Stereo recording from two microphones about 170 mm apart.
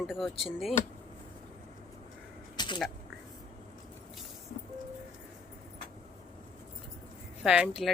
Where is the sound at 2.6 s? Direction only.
25° left (ahead or behind).